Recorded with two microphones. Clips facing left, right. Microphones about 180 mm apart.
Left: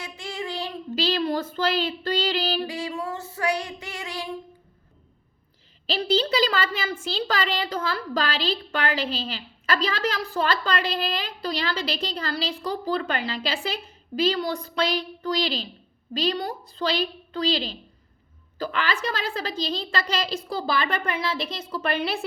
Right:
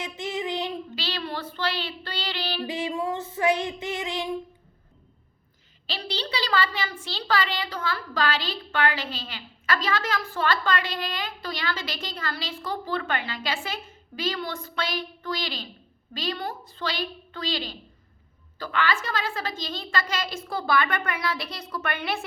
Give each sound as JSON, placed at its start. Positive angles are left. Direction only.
{"t": 0.0, "sound": "child singing", "side_deg": -20}
{"t": 0.9, "sound": "a woman's voice", "side_deg": 40}
{"t": 2.6, "sound": "child singing", "side_deg": -20}
{"t": 5.9, "sound": "a child's voice", "side_deg": 45}
{"t": 18.9, "sound": "a woman's voice", "side_deg": 40}